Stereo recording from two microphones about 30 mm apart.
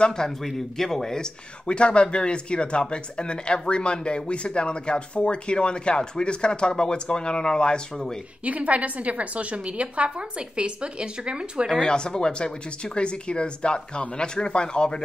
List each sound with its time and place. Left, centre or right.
0.4 s speech: centre; by 1.8 s left
1.8 s speech: left
8.5 s a woman's voice: right
11.8 s speech: left